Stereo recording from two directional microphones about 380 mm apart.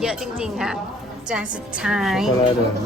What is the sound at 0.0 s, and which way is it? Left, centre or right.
Speech, centre.